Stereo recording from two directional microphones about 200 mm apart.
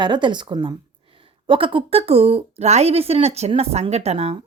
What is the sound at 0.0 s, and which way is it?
A woman's voice, 25° right (ahead or behind).